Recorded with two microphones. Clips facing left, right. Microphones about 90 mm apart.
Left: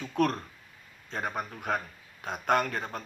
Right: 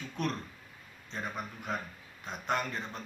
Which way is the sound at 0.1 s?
50° left (ahead or behind).